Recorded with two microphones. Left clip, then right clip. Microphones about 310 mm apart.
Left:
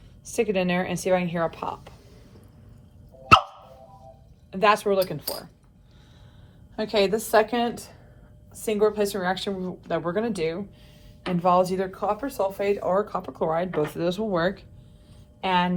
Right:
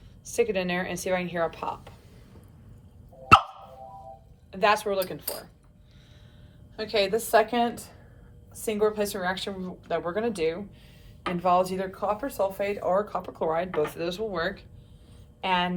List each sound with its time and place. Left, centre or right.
0.3 s speech: centre
4.5 s speech: centre
6.7 s speech: centre
13.5 s speech: left
13.9 s speech: centre